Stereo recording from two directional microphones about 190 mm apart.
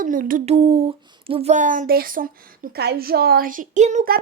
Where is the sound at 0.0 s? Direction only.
45° right (ahead or behind).